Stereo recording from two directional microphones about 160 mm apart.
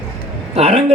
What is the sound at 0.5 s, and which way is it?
Speech, 40° right (ahead or behind).